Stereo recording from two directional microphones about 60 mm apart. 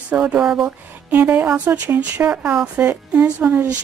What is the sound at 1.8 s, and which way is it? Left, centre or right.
Speech, right.